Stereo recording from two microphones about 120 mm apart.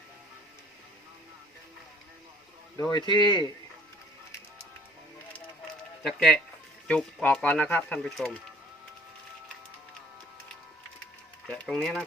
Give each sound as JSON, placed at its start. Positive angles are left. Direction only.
{"t": 2.9, "sound": "speech", "side_deg": 35}
{"t": 6.0, "sound": "speech", "side_deg": 5}
{"t": 11.4, "sound": "a sound", "side_deg": 10}